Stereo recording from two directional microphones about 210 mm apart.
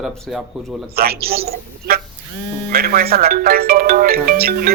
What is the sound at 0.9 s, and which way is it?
Speech, 45° right (ahead or behind).